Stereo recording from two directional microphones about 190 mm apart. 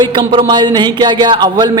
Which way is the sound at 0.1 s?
25° right (ahead or behind).